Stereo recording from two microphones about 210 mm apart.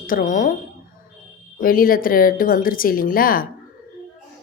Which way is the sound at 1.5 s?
40° left (ahead or behind).